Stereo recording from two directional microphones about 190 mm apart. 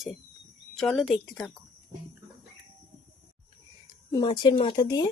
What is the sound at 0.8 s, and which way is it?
Speech, centre (ahead or behind).